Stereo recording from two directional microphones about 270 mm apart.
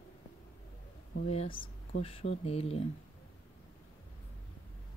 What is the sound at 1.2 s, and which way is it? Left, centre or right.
Speech, left.